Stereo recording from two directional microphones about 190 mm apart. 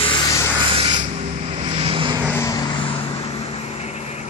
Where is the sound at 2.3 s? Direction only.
15° left (ahead or behind).